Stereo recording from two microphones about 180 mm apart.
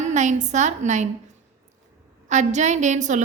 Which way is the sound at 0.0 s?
40° right (ahead or behind).